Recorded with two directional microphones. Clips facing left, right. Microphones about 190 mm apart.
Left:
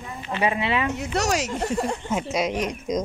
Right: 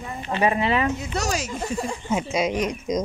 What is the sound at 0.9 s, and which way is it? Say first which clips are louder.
Speech: left 3 dB; 70° left (ahead or behind).